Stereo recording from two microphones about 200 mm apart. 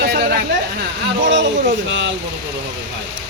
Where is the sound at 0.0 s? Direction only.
50° right (ahead or behind).